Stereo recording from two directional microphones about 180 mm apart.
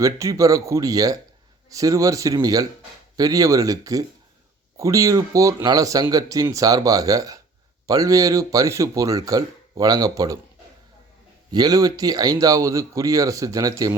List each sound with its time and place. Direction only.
0.0 s speech: 20° right (ahead or behind)
11.5 s speech: 20° right (ahead or behind)